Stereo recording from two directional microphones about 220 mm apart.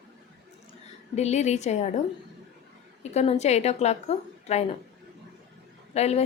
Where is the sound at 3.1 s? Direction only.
30° left (ahead or behind).